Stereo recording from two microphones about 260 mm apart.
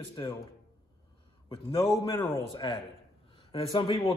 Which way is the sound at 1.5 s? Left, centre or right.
Centre.